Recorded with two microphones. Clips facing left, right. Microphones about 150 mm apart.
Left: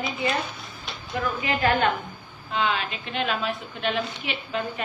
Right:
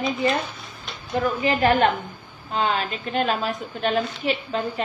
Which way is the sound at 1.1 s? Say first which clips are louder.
Right 5 dB; 40° right (ahead or behind).